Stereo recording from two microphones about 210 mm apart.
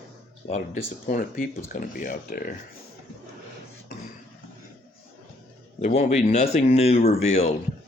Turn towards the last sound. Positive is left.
turn(degrees=30)  # may be behind; listen again after turning